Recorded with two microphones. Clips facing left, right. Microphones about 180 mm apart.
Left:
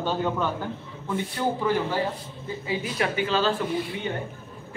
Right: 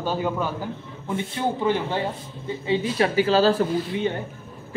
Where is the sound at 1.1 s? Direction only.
25° right (ahead or behind).